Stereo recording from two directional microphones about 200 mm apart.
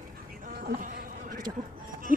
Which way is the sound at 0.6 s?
45° right (ahead or behind).